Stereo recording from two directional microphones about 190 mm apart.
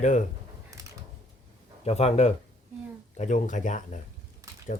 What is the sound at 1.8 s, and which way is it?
A man's voice, 35° left (ahead or behind).